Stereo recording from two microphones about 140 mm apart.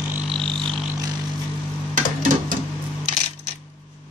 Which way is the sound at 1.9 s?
75° right (ahead or behind).